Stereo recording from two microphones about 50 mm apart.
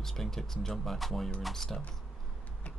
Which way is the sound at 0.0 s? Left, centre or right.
Centre.